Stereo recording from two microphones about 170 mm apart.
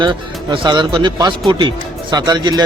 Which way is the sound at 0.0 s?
30° right (ahead or behind).